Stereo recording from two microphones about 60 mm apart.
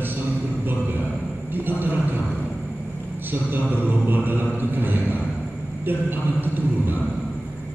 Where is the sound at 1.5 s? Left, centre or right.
Right.